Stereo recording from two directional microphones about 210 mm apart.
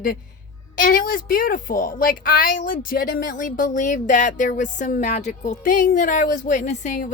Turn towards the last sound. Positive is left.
turn(degrees=35)  # may be behind; listen again after turning